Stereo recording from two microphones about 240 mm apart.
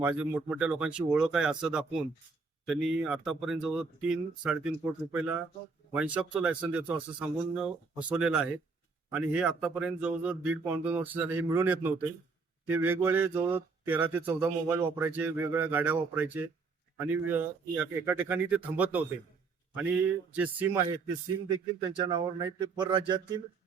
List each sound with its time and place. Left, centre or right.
0.0 s speech: centre